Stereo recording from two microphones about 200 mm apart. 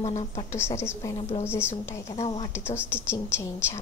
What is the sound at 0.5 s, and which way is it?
A woman's voice, 10° left (ahead or behind).